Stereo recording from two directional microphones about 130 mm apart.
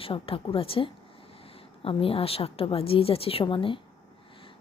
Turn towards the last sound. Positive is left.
turn(degrees=40)  # may be behind; listen again after turning